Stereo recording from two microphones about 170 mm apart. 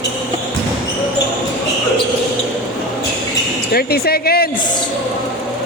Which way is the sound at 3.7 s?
65° left (ahead or behind).